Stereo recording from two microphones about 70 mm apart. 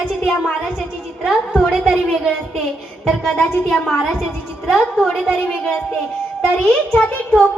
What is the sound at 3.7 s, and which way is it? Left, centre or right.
A woman's voice, centre.